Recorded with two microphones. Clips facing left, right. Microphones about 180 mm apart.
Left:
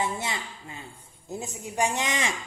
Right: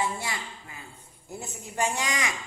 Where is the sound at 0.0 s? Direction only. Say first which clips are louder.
Left 1 dB; 20° left (ahead or behind).